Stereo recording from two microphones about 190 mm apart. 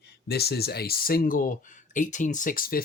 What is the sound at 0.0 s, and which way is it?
Speech, 55° left (ahead or behind).